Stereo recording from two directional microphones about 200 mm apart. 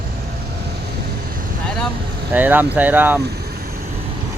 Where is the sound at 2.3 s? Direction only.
10° right (ahead or behind).